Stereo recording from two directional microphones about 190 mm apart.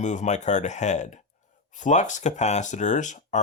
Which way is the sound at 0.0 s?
40° left (ahead or behind).